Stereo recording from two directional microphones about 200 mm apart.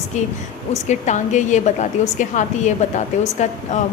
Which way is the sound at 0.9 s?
35° left (ahead or behind).